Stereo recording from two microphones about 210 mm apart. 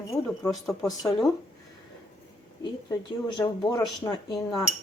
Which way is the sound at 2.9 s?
20° left (ahead or behind).